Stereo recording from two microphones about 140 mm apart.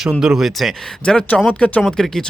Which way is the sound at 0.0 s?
5° right (ahead or behind).